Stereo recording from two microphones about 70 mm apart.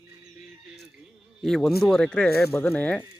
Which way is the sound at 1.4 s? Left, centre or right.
Centre.